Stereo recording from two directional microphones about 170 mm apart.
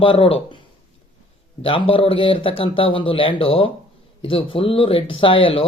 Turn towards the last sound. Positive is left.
turn(degrees=35)  # may be behind; listen again after turning